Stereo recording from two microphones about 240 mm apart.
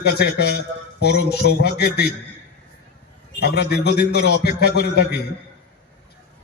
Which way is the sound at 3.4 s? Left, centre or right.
Left.